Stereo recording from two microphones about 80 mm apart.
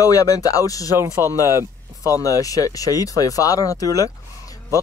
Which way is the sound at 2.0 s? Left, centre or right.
Left.